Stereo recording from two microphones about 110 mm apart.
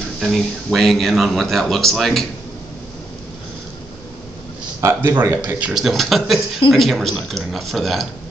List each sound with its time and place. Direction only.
0.2 s speech: centre (ahead or behind)
4.8 s speech: 20° right (ahead or behind)
5.7 s speech: centre (ahead or behind)